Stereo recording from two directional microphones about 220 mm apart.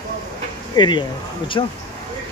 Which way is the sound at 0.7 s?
20° left (ahead or behind).